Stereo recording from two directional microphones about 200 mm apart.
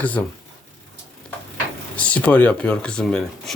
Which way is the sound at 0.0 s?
10° left (ahead or behind).